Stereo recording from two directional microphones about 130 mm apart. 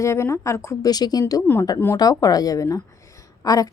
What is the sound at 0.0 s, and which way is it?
A woman's voice, 20° left (ahead or behind).